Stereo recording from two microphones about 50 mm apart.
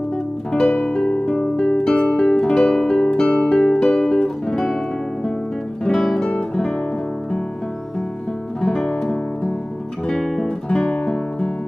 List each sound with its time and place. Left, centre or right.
0.8 s music: centre
3.3 s music: left
3.5 s guitar: centre
8.5 s music: centre
10.0 s guitar: centre
10.7 s guitar: left